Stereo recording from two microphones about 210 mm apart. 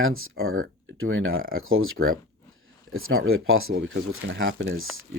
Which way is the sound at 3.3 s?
75° right (ahead or behind).